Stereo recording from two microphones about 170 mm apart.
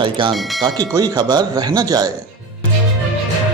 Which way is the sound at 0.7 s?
25° right (ahead or behind).